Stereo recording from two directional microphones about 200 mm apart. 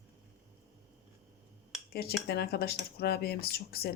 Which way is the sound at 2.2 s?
50° left (ahead or behind).